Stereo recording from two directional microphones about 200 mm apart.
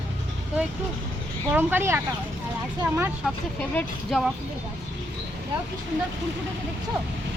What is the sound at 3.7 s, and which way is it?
Speech, 5° left (ahead or behind).